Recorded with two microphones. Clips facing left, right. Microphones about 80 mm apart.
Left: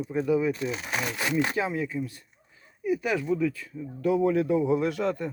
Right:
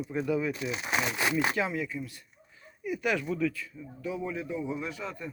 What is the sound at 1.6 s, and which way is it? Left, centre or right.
Speech, left.